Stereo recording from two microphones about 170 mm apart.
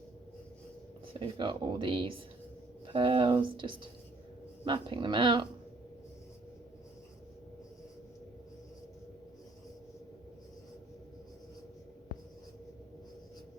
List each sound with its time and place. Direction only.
1.2 s speech: 30° right (ahead or behind)